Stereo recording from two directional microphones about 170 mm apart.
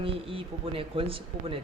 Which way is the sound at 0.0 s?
30° right (ahead or behind).